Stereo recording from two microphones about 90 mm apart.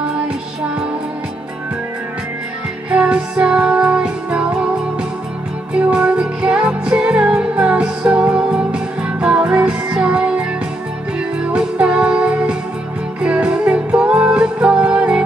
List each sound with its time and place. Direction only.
2.9 s music: 15° right (ahead or behind)
5.7 s music: 10° right (ahead or behind)
11.5 s music: 10° right (ahead or behind)